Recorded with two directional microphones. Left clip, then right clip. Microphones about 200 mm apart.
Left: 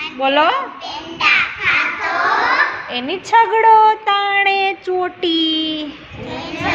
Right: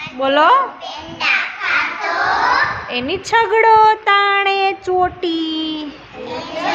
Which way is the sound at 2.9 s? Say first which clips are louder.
Left 1 dB; 10° right (ahead or behind).